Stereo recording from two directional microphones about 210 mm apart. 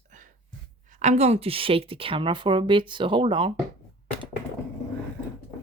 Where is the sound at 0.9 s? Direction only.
35° right (ahead or behind).